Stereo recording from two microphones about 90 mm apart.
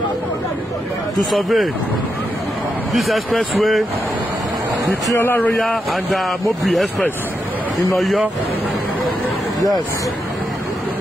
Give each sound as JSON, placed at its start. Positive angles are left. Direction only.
{"t": 1.3, "sound": "speech", "side_deg": 0}
{"t": 5.2, "sound": "speech", "side_deg": 20}
{"t": 6.1, "sound": "speech", "side_deg": 0}